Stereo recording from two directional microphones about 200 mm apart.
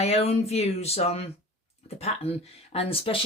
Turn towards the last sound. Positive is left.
turn(degrees=30)  # may be behind; listen again after turning